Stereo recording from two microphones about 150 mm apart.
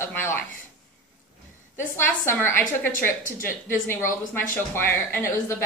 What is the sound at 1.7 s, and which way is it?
A woman's voice, 15° left (ahead or behind).